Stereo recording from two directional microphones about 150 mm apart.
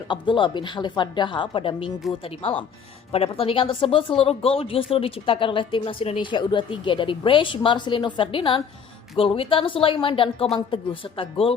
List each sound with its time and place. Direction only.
0.1 s speech: 30° left (ahead or behind)